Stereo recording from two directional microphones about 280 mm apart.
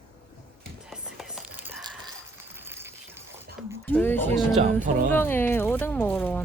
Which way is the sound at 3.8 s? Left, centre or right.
Centre.